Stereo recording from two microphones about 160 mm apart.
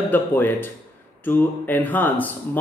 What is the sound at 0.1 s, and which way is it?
Speech, 15° left (ahead or behind).